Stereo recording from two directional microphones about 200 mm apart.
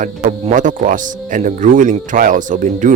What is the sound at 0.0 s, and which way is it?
Speech, 40° right (ahead or behind).